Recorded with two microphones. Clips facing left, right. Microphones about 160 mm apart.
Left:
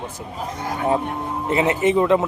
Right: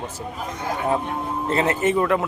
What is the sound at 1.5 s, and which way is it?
Speech, 15° left (ahead or behind).